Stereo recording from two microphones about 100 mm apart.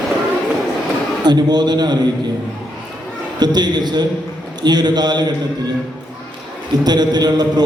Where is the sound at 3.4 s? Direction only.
45° right (ahead or behind).